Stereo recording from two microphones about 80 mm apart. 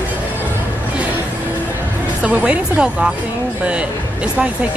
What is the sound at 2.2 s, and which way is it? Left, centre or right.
Speech, centre.